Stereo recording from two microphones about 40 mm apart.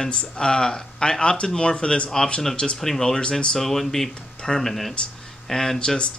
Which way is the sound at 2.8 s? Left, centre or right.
Centre.